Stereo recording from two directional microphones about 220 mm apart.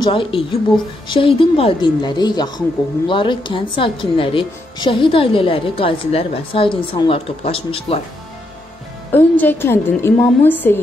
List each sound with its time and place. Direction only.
0.0 s speech: 25° left (ahead or behind)
9.1 s a woman's voice: 10° left (ahead or behind)